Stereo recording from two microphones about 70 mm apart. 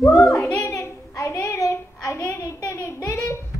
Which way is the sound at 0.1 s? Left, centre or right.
Centre.